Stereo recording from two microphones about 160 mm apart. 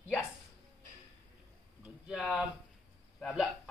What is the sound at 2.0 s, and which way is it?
Speech, 5° right (ahead or behind).